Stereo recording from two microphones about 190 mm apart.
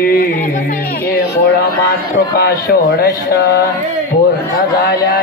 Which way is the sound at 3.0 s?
55° left (ahead or behind).